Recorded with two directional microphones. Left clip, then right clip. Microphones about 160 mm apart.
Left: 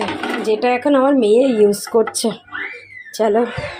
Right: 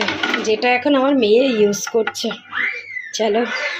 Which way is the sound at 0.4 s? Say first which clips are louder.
Left 2 dB; 15° left (ahead or behind).